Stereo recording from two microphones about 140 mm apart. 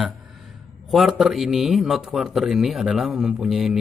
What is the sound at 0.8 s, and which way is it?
A man's voice, centre (ahead or behind).